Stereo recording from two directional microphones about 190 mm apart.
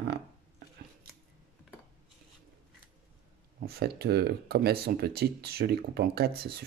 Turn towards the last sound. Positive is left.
turn(degrees=-55)  # may be behind; listen again after turning